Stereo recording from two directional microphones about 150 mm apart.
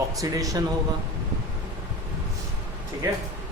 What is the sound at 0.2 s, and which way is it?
Speech, 25° right (ahead or behind).